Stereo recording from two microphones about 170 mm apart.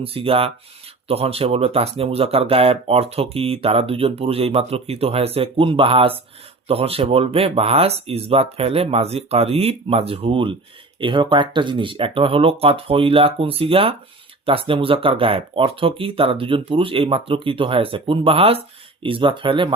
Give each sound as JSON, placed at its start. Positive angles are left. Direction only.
{"t": 0.0, "sound": "speech", "side_deg": -35}